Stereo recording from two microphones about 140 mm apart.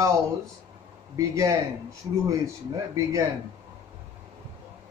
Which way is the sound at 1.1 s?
20° right (ahead or behind).